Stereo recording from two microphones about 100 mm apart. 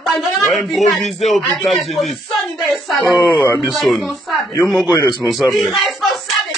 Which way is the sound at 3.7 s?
Centre (ahead or behind).